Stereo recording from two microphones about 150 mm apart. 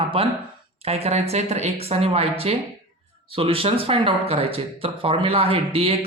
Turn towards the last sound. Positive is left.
turn(degrees=-40)  # may be behind; listen again after turning